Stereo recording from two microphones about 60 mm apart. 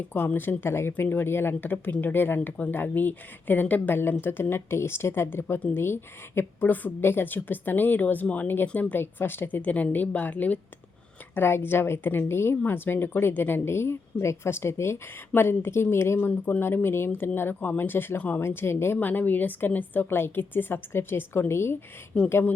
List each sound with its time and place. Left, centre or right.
0.3 s a woman's voice: left
9.6 s a woman's voice: left
11.3 s a woman's voice: left
18.9 s speech: left
22.1 s speech: centre